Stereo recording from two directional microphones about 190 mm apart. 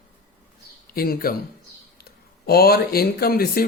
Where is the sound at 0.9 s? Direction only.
50° left (ahead or behind).